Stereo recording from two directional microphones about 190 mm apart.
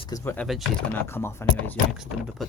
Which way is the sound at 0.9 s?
10° left (ahead or behind).